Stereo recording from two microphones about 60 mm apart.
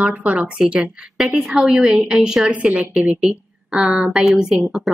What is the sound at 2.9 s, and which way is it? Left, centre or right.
A woman's voice, centre.